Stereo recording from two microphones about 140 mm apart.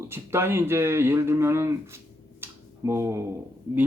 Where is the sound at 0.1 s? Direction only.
15° right (ahead or behind).